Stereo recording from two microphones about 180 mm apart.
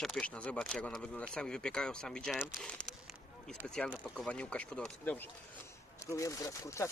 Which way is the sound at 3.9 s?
5° left (ahead or behind).